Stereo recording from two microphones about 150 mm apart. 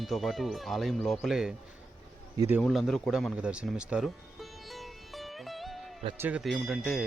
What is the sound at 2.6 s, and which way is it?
Music, centre (ahead or behind).